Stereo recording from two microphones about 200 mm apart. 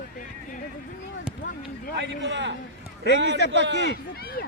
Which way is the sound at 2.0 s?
65° right (ahead or behind).